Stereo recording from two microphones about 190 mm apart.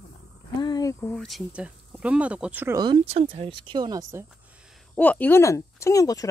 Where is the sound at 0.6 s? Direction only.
20° left (ahead or behind).